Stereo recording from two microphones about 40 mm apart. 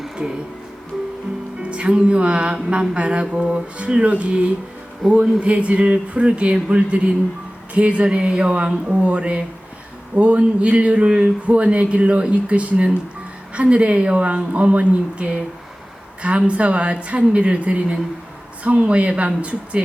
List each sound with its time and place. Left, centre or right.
1.7 s speech: right
5.0 s speech: centre
5.4 s speech: right